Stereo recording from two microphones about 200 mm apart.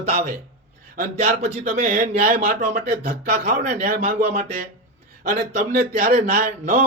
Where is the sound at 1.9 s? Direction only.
50° right (ahead or behind).